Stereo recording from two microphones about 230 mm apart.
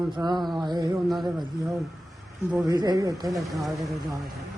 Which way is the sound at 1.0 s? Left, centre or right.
Centre.